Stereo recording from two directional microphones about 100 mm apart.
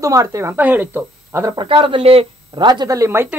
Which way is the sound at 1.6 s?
60° right (ahead or behind).